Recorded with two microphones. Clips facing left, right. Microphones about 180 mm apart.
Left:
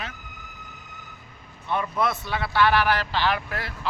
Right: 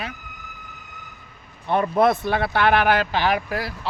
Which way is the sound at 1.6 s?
55° right (ahead or behind).